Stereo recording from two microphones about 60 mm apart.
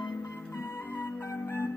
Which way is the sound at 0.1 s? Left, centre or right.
Left.